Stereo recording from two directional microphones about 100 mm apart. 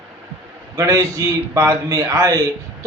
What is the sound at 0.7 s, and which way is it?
Speech, 35° right (ahead or behind).